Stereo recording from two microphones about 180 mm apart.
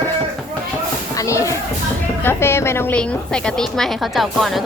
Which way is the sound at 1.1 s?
20° left (ahead or behind).